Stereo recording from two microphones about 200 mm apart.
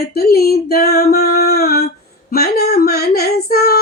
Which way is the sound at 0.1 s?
50° left (ahead or behind).